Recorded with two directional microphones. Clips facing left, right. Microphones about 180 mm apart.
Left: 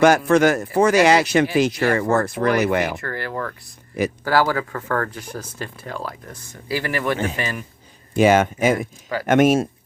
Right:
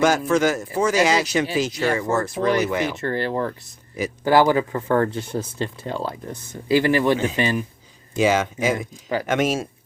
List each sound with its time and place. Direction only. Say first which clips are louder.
0.0 s speech: left 4 dB; 60° left (ahead or behind)
3.0 s speech: right 4 dB; 25° right (ahead or behind)
8.1 s speech: left 4 dB; 55° left (ahead or behind)